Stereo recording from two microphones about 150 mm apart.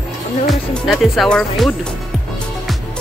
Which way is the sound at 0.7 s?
Centre (ahead or behind).